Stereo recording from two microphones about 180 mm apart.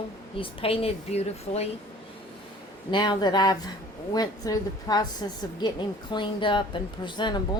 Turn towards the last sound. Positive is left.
turn(degrees=25)  # may be behind; listen again after turning